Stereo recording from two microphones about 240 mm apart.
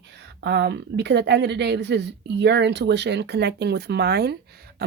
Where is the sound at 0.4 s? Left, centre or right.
Right.